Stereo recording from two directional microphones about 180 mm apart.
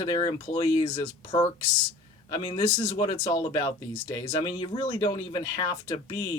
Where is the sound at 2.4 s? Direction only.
30° left (ahead or behind).